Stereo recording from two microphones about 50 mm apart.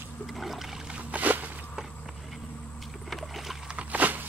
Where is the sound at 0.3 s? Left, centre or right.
Centre.